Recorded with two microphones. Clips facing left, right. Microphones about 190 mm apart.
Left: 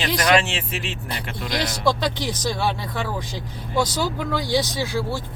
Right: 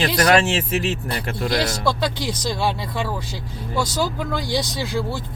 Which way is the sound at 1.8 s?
10° right (ahead or behind).